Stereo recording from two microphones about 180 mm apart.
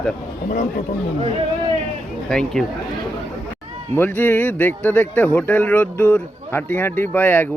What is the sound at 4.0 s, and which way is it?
A man's voice, 10° left (ahead or behind).